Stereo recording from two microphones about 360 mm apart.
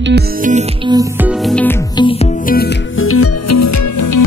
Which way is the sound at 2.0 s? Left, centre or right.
Centre.